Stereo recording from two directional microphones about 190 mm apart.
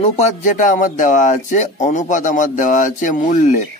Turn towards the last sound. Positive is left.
turn(degrees=45)  # may be behind; listen again after turning